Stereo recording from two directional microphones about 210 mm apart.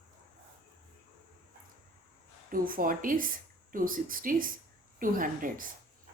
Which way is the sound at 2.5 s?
40° right (ahead or behind).